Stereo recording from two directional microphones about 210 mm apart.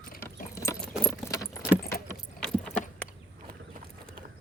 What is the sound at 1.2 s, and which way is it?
Keys jangling, 15° left (ahead or behind).